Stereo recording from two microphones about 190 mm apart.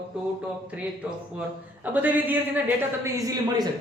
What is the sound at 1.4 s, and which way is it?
A man's voice, 10° right (ahead or behind).